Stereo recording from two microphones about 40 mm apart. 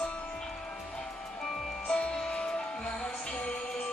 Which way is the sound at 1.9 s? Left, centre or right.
Left.